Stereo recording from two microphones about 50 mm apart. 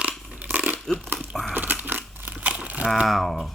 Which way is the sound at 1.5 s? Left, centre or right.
Right.